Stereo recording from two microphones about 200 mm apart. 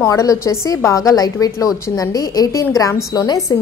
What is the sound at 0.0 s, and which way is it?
A woman's voice, 15° left (ahead or behind).